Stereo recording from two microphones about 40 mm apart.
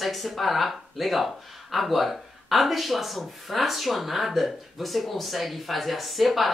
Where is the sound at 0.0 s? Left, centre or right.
Centre.